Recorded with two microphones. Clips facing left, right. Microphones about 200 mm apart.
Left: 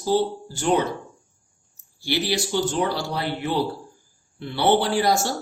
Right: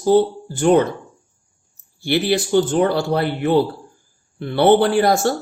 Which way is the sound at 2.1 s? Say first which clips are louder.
Right 6 dB; 55° right (ahead or behind).